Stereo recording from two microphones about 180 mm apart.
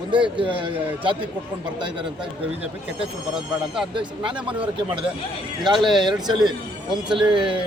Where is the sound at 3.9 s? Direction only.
25° right (ahead or behind).